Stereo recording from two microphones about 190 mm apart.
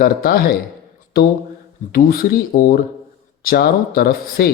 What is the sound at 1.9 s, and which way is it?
Speech, 50° left (ahead or behind).